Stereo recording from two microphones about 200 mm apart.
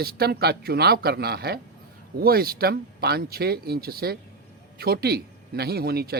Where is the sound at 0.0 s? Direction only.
50° right (ahead or behind).